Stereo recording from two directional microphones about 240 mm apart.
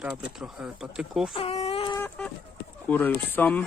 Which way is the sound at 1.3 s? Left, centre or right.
Left.